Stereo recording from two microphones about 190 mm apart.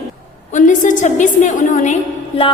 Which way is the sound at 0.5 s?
40° left (ahead or behind).